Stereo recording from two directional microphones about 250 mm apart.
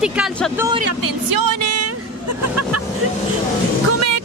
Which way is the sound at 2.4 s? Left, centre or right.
Right.